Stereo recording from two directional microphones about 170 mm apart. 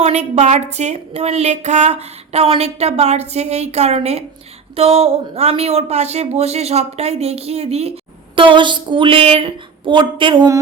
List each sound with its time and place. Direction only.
0.0 s a woman's voice: 40° right (ahead or behind); by 10.6 s 25° right (ahead or behind)